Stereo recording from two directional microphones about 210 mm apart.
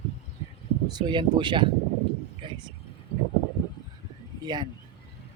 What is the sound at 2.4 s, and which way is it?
Vehicle, 25° right (ahead or behind).